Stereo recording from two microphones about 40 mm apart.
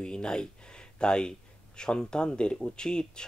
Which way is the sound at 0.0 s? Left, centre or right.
Left.